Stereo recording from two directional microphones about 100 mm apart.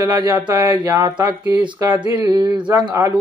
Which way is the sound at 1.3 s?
50° right (ahead or behind).